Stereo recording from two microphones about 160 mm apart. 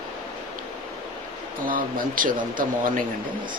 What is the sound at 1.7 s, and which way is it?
Speech, 60° right (ahead or behind).